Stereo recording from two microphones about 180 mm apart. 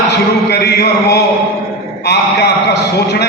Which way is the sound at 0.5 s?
65° left (ahead or behind).